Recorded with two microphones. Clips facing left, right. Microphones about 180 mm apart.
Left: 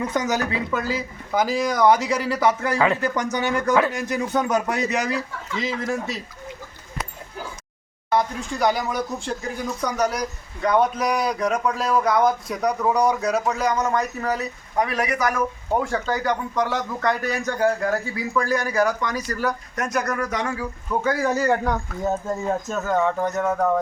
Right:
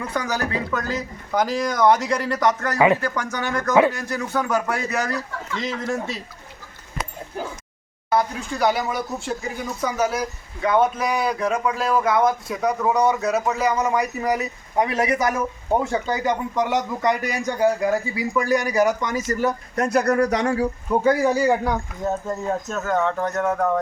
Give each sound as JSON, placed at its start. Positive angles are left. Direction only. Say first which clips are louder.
{"t": 0.1, "sound": "a man's voice", "louder": "left 1 dB", "side_deg": 15}
{"t": 2.7, "sound": "speech", "louder": "right 3 dB", "side_deg": -15}
{"t": 3.0, "sound": "a man's voice", "louder": "left 3 dB", "side_deg": 15}
{"t": 8.1, "sound": "speech", "louder": "even", "side_deg": -5}
{"t": 21.2, "sound": "speech", "louder": "right 2 dB", "side_deg": -10}
{"t": 22.4, "sound": "speech", "louder": "even", "side_deg": 5}